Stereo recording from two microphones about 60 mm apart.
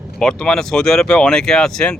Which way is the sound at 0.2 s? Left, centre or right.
Centre.